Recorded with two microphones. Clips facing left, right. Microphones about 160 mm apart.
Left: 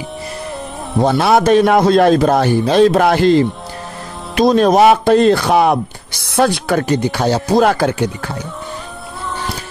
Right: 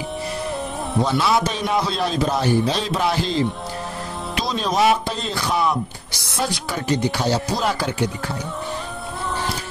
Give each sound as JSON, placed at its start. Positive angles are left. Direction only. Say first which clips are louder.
{"t": 1.0, "sound": "a man's voice", "louder": "left 9 dB", "side_deg": 60}